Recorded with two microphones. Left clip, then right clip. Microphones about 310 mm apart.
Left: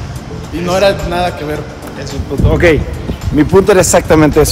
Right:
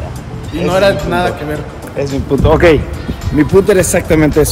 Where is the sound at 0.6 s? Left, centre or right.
Centre.